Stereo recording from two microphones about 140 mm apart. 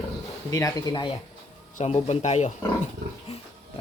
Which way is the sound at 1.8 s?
50° left (ahead or behind).